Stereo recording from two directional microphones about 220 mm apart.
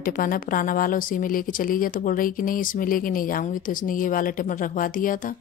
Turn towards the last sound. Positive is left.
turn(degrees=40)  # may be behind; listen again after turning